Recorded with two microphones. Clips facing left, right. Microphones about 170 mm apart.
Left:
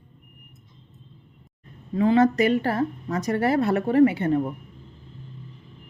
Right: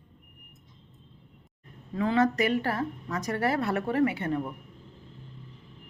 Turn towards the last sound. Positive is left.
turn(degrees=30)  # may be behind; listen again after turning